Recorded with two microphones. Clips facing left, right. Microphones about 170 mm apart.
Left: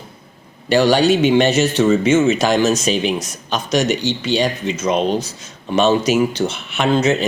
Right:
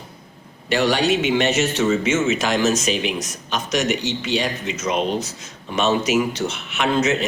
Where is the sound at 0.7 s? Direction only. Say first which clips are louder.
Left 5 dB; 35° left (ahead or behind).